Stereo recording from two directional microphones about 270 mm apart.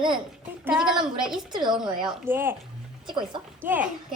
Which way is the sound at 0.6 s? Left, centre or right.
Centre.